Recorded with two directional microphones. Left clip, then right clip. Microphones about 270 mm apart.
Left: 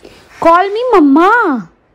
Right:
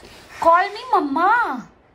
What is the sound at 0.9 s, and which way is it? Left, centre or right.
Speech, centre.